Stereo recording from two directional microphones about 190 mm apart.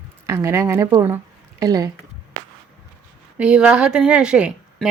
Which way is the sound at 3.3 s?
5° right (ahead or behind).